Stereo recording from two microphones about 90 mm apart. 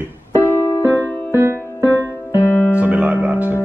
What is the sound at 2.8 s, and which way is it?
Music, 20° right (ahead or behind).